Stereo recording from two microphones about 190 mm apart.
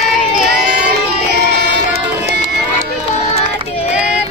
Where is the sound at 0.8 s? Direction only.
60° right (ahead or behind).